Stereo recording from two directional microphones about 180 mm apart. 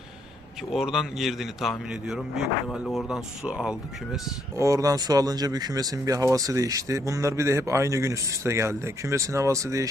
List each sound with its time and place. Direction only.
0.7 s speech: 5° right (ahead or behind)
4.5 s speech: 15° right (ahead or behind)